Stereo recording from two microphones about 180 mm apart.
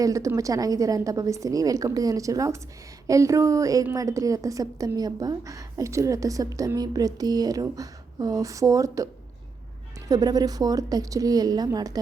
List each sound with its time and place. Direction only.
0.0 s a woman's voice: 15° right (ahead or behind)
10.1 s a woman's voice: 20° right (ahead or behind)